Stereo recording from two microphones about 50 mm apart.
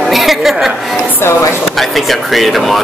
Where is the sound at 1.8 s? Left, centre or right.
Centre.